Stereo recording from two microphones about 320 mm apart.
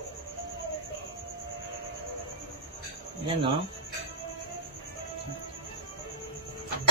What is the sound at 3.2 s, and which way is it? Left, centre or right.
Speech, centre.